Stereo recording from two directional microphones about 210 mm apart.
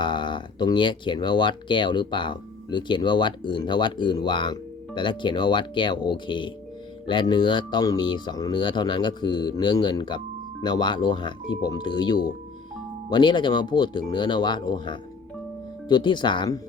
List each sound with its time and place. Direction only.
0.0 s speech: 20° left (ahead or behind)